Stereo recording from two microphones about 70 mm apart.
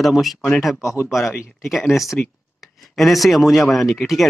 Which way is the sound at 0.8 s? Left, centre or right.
Left.